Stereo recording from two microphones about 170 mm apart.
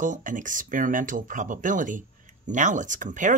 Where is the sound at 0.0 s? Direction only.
50° right (ahead or behind).